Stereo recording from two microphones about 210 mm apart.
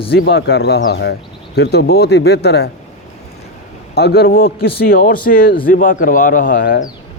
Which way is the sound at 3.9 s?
50° left (ahead or behind).